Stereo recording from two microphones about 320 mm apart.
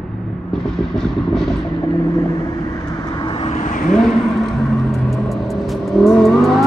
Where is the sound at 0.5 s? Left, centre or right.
Centre.